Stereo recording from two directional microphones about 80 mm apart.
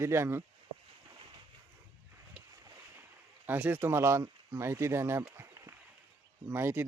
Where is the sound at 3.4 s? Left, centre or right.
Right.